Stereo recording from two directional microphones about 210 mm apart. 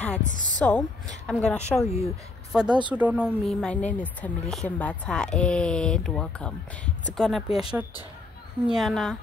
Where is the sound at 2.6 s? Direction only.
20° right (ahead or behind).